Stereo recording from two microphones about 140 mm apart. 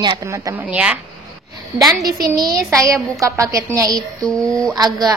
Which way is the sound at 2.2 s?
25° right (ahead or behind).